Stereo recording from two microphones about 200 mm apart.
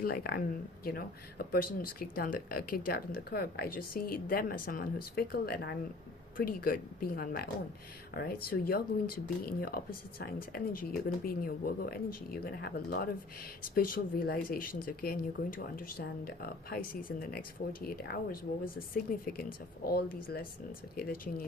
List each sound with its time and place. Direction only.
0.0 s speech: 50° left (ahead or behind)